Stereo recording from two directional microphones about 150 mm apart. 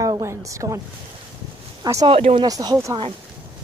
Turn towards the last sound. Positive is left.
turn(degrees=-25)  # may be behind; listen again after turning